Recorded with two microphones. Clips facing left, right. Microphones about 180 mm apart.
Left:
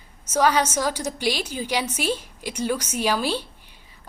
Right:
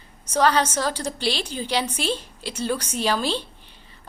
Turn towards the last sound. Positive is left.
turn(degrees=10)  # may be behind; listen again after turning